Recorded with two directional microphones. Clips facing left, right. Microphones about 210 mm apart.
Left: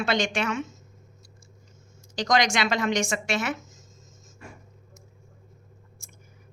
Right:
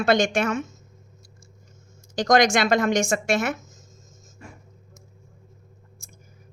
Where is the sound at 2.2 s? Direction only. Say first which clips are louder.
Right 5 dB; 45° right (ahead or behind).